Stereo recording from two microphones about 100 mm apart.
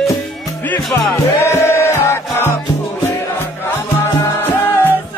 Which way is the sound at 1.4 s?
25° left (ahead or behind).